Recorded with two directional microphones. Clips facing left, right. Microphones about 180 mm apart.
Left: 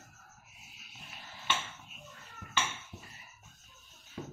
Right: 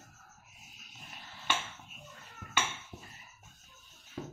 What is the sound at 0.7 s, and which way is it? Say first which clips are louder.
Wild animals: left 1 dB; 45° right (ahead or behind).